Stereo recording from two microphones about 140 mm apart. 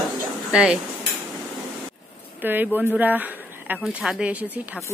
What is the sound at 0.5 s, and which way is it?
Speech, 5° right (ahead or behind).